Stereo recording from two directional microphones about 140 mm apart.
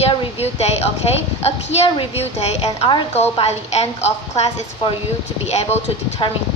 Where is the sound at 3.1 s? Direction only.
50° left (ahead or behind).